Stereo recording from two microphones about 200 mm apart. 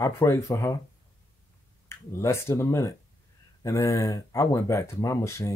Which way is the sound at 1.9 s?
15° left (ahead or behind).